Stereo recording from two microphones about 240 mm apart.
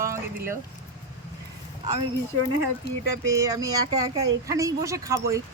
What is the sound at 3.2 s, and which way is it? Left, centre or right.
Speech, centre.